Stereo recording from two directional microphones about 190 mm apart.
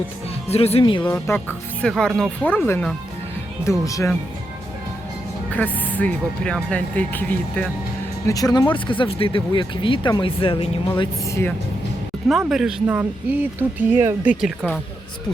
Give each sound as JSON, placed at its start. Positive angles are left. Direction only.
{"t": 0.4, "sound": "speech", "side_deg": 30}
{"t": 1.0, "sound": "speech", "side_deg": 10}
{"t": 5.5, "sound": "speech", "side_deg": 10}
{"t": 8.3, "sound": "speech", "side_deg": 20}
{"t": 11.3, "sound": "speech", "side_deg": 15}
{"t": 12.5, "sound": "speech", "side_deg": -5}